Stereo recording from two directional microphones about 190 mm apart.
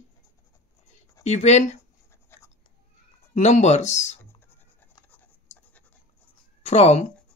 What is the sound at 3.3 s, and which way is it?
Speech, 35° left (ahead or behind).